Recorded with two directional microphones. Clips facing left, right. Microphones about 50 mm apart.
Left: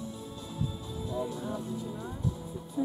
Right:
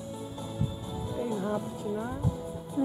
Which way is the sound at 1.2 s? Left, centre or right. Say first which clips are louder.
Right 6 dB; right.